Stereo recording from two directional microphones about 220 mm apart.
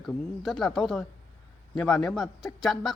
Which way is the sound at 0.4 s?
Centre (ahead or behind).